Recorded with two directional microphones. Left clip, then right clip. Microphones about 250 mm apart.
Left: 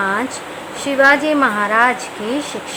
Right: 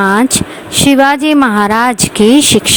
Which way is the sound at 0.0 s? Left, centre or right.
Right.